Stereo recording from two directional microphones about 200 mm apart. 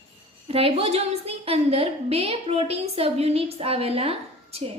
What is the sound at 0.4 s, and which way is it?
A woman's voice, 30° right (ahead or behind).